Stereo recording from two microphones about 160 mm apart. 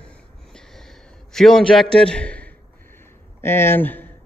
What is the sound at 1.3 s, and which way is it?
A man's voice, 5° left (ahead or behind).